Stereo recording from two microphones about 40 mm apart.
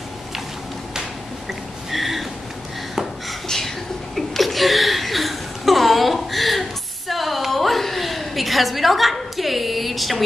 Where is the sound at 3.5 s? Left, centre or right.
Centre.